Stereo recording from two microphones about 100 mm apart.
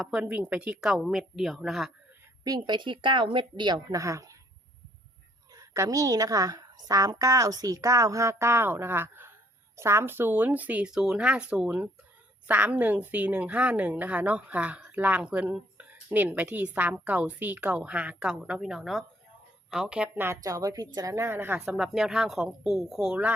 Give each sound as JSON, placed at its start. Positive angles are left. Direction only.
{"t": 0.0, "sound": "a woman's voice", "side_deg": -10}
{"t": 2.4, "sound": "a woman's voice", "side_deg": -45}
{"t": 3.9, "sound": "a woman's voice", "side_deg": -35}
{"t": 5.5, "sound": "a woman's voice", "side_deg": -35}
{"t": 20.1, "sound": "speech", "side_deg": -25}
{"t": 20.4, "sound": "a woman's voice", "side_deg": -35}
{"t": 21.2, "sound": "speech", "side_deg": -20}
{"t": 21.6, "sound": "speech", "side_deg": -5}